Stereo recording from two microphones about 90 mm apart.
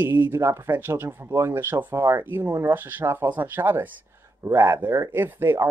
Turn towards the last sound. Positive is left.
turn(degrees=-25)  # may be behind; listen again after turning